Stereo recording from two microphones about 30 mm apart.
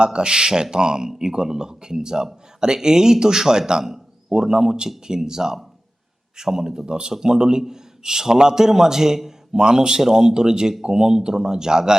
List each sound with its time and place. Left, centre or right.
0.0 s a man's voice: right